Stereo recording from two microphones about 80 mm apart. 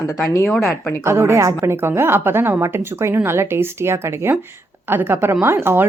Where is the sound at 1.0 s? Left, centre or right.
Right.